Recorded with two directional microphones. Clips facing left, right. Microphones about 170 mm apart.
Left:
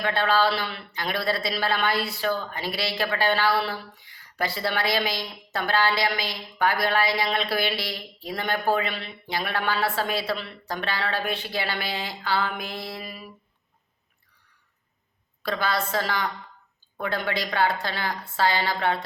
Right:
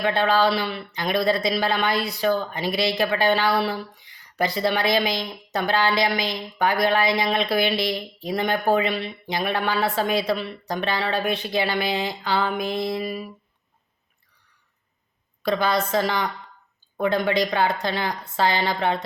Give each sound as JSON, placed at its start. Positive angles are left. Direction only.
{"t": 0.0, "sound": "speech", "side_deg": -20}
{"t": 15.4, "sound": "speech", "side_deg": -20}